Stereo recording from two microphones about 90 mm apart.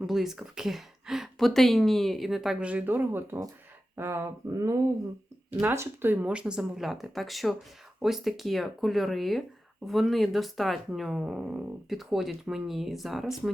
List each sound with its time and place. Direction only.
0.1 s speech: 5° right (ahead or behind); by 3.4 s 25° right (ahead or behind)
3.9 s a sound: 30° right (ahead or behind)
5.6 s speech: 25° right (ahead or behind); by 13.5 s 5° right (ahead or behind)